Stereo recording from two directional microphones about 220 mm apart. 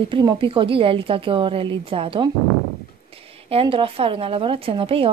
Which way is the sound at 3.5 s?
25° right (ahead or behind).